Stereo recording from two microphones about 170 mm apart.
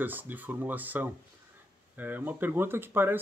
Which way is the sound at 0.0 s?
10° right (ahead or behind).